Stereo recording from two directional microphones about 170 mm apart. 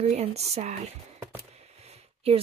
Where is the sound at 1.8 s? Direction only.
35° right (ahead or behind).